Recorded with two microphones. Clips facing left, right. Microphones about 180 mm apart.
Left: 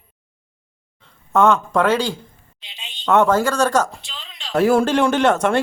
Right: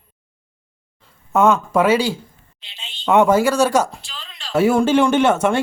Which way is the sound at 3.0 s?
10° right (ahead or behind).